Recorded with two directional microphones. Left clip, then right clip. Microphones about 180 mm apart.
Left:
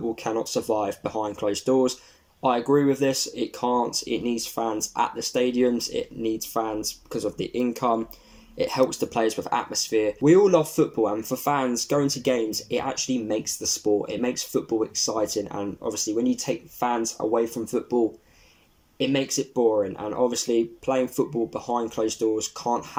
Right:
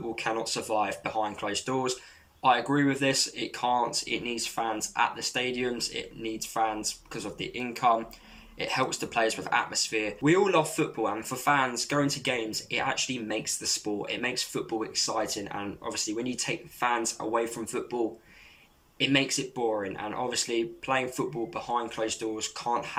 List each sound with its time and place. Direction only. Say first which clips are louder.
0.2 s speech: left 4 dB; 40° left (ahead or behind)
18.9 s speech: left 1 dB; 40° left (ahead or behind)